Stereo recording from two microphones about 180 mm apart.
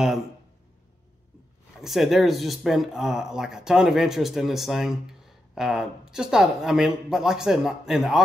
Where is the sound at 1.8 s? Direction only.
Centre (ahead or behind).